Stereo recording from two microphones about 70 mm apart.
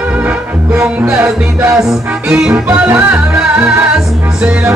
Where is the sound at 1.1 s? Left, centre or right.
Centre.